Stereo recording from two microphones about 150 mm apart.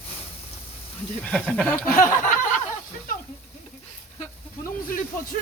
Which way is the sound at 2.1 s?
55° left (ahead or behind).